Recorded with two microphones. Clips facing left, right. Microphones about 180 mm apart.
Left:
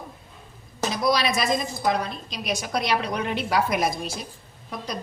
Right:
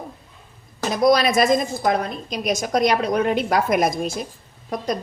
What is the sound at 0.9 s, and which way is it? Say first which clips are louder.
A woman's voice: right 6 dB; 50° right (ahead or behind).